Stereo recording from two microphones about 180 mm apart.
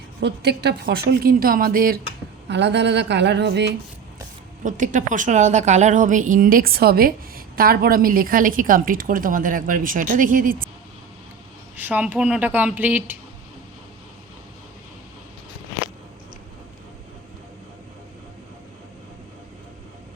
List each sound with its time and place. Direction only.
0.2 s a woman's voice: 70° right (ahead or behind); by 2.0 s 55° right (ahead or behind)
2.5 s a woman's voice: 75° right (ahead or behind)
4.6 s a woman's voice: 45° right (ahead or behind)
11.8 s speech: 10° right (ahead or behind)